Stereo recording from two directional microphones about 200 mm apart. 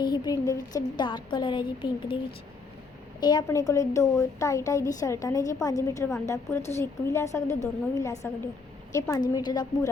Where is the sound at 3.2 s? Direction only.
20° left (ahead or behind).